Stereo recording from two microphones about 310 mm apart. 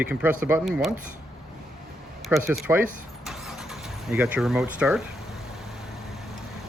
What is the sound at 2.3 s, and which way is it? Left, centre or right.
Speech, centre.